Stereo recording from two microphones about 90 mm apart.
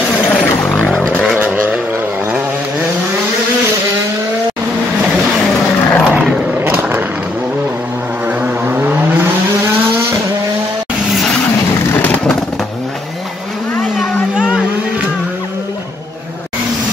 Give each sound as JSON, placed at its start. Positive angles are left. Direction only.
{"t": 0.3, "sound": "vehicle", "side_deg": 5}
{"t": 1.4, "sound": "vehicle", "side_deg": -15}
{"t": 5.9, "sound": "vehicle", "side_deg": 15}
{"t": 6.1, "sound": "a sound", "side_deg": -10}
{"t": 6.8, "sound": "vehicle", "side_deg": -20}
{"t": 8.3, "sound": "vehicle", "side_deg": -20}
{"t": 14.3, "sound": "a sound", "side_deg": -10}